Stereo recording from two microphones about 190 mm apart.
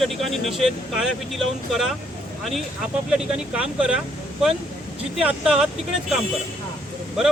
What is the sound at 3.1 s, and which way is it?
Speech, 5° right (ahead or behind).